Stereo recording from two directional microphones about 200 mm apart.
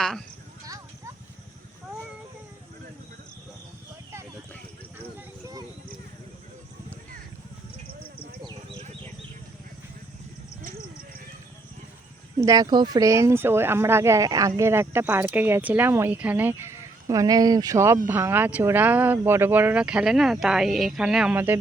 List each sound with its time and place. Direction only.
0.0 s speech: 5° left (ahead or behind)
0.6 s clip-clop: 15° right (ahead or behind)
8.4 s a sound: 30° right (ahead or behind)
12.4 s speech: 15° right (ahead or behind)